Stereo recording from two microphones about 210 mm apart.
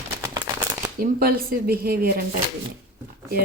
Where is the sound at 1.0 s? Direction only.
45° right (ahead or behind).